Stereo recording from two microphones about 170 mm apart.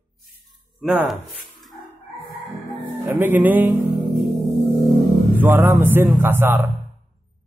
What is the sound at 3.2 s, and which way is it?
Music, 10° right (ahead or behind).